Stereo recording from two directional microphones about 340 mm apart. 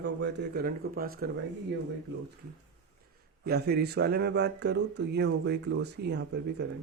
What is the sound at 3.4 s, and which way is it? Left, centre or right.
Speech, right.